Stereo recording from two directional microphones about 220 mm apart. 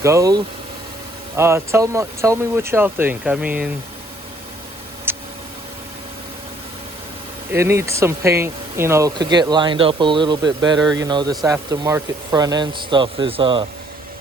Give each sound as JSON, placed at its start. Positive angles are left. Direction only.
{"t": 0.0, "sound": "speech", "side_deg": -15}
{"t": 5.1, "sound": "a sound", "side_deg": -10}
{"t": 7.5, "sound": "speech", "side_deg": -10}